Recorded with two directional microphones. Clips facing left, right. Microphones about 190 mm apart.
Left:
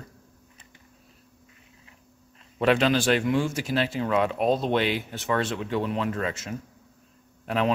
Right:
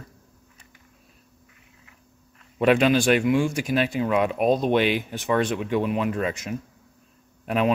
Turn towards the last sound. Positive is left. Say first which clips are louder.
# right 3 dB
turn(degrees=-15)  # may be behind; listen again after turning